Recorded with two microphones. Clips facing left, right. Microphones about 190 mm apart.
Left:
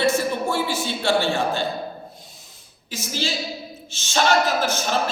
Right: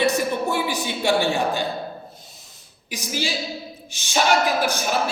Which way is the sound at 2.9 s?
15° right (ahead or behind).